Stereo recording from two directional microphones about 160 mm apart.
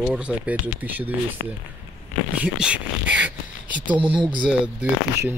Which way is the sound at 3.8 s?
30° right (ahead or behind).